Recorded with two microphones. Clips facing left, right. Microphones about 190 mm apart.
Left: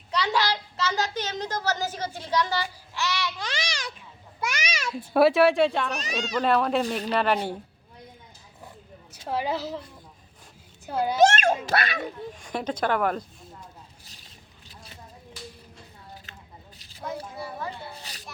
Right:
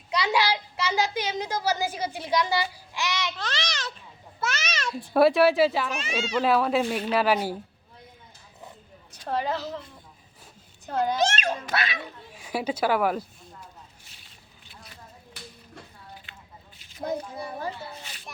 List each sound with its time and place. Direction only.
0.1 s a child's voice: 10° right (ahead or behind)
3.3 s a child's voice: 10° left (ahead or behind); by 7.5 s 5° right (ahead or behind)
9.2 s a child's voice: 5° left (ahead or behind)
10.8 s a child's voice: 10° left (ahead or behind)
11.2 s speech: 50° left (ahead or behind)
12.3 s a child's voice: 5° right (ahead or behind)
15.3 s a sound: 60° right (ahead or behind)
16.3 s a sound: 40° left (ahead or behind)
18.1 s a sound: 35° left (ahead or behind)